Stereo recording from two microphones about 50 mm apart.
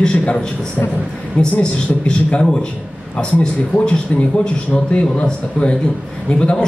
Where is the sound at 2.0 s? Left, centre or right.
Centre.